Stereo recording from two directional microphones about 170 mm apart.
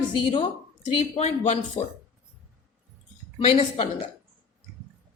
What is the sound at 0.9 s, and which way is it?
Speech, 40° left (ahead or behind).